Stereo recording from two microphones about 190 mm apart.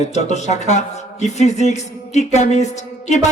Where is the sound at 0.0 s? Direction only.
35° left (ahead or behind).